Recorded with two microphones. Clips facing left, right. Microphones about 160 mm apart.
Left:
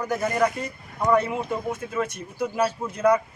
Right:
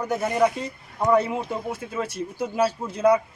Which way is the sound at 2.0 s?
30° right (ahead or behind).